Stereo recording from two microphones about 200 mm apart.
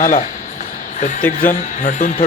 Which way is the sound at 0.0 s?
40° left (ahead or behind).